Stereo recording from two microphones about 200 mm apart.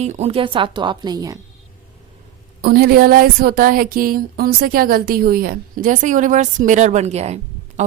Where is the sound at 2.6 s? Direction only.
50° right (ahead or behind).